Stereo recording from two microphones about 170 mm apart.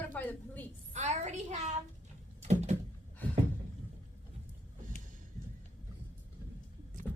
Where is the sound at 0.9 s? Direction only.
45° right (ahead or behind).